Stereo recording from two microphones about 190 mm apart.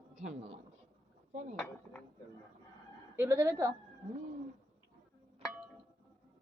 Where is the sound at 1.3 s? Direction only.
35° right (ahead or behind).